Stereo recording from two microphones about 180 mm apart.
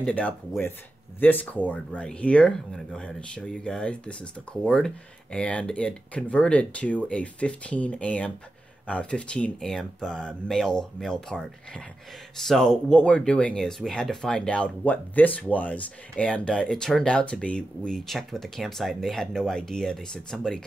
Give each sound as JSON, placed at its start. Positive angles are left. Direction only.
{"t": 0.0, "sound": "speech", "side_deg": 5}